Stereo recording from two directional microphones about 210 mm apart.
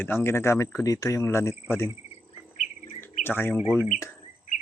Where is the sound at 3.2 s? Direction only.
10° left (ahead or behind).